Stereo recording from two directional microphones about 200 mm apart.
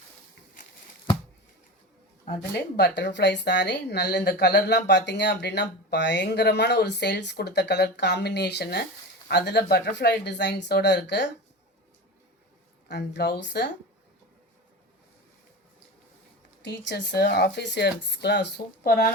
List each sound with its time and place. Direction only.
2.7 s speech: 60° left (ahead or behind)
12.9 s speech: 55° left (ahead or behind)
16.6 s speech: 60° left (ahead or behind)